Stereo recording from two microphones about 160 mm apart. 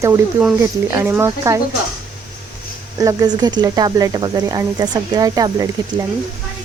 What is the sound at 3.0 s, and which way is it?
Speech, 20° right (ahead or behind).